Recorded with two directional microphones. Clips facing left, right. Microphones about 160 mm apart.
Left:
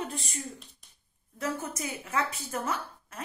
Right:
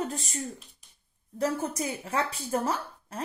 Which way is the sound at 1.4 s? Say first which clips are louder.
Right 5 dB; 35° right (ahead or behind).